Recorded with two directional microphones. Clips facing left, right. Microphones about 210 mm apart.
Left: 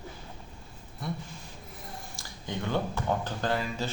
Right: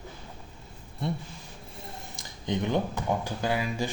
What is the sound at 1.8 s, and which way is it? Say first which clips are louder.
Speech: right 2 dB; 20° right (ahead or behind).